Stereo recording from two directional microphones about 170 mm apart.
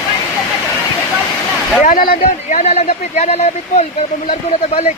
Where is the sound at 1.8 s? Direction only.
55° left (ahead or behind).